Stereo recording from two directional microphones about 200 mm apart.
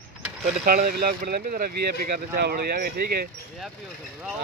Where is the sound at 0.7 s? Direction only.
45° right (ahead or behind).